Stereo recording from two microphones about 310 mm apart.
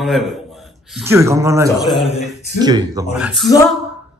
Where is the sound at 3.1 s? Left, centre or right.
Centre.